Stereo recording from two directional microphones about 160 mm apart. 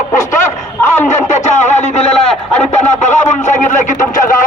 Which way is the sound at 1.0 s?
50° left (ahead or behind).